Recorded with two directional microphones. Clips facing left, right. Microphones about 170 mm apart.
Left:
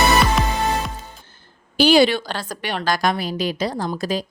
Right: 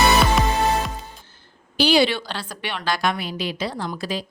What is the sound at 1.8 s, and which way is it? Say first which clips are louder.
A woman's voice: left 4 dB; 45° left (ahead or behind).